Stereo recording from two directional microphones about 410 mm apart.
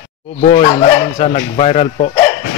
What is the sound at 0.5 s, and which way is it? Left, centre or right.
Speech, centre.